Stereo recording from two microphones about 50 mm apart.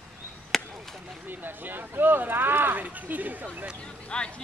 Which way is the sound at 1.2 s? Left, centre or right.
Right.